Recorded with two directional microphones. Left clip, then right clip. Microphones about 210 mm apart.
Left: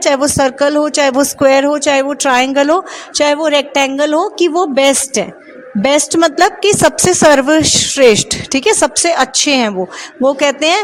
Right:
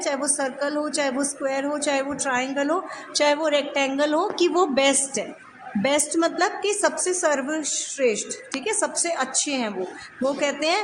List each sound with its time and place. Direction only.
0.0 s a woman's voice: 40° left (ahead or behind)